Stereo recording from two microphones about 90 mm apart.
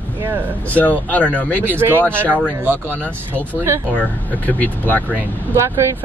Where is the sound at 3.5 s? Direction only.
25° right (ahead or behind).